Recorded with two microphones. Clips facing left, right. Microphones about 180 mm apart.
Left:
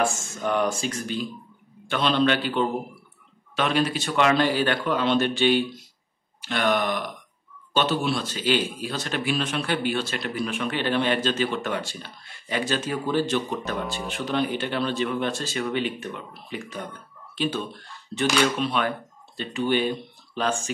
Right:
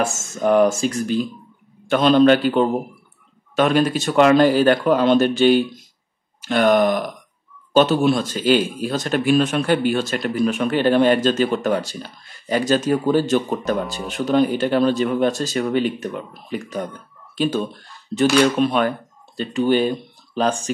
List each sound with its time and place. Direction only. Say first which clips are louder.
0.1 s speech: right 9 dB; 45° right (ahead or behind)
18.6 s speech: right 7 dB; 50° right (ahead or behind)